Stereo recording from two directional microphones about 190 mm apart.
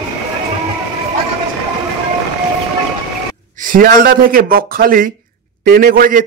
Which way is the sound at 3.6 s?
45° right (ahead or behind).